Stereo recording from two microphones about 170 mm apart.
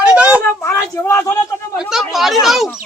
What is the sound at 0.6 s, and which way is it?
Speech, 15° left (ahead or behind).